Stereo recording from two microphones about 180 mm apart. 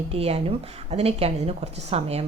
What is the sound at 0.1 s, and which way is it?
A woman's voice, 35° right (ahead or behind).